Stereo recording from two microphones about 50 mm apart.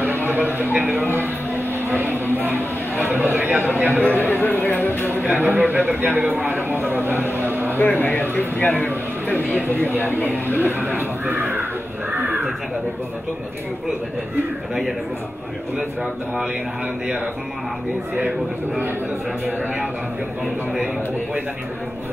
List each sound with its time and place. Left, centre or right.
0.3 s speech: right
1.1 s a sound: right
3.0 s a man's voice: right
4.0 s speech: left
5.4 s a man's voice: right
7.3 s a sound: right
7.8 s speech: left
9.5 s a man's voice: right
10.0 s speech: left
10.3 s speech: right
12.1 s a sound: right